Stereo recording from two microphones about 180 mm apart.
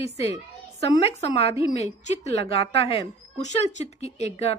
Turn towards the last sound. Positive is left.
turn(degrees=35)  # may be behind; listen again after turning